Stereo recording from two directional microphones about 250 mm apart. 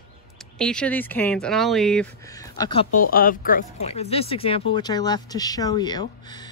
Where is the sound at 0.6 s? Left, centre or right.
Centre.